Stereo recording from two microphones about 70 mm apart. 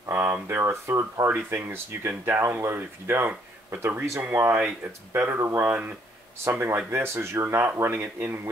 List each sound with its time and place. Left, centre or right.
0.1 s speech: right
0.7 s speech: right
1.3 s speech: right
6.3 s speech: right